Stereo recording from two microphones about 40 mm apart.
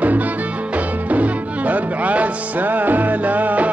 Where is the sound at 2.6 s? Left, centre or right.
Right.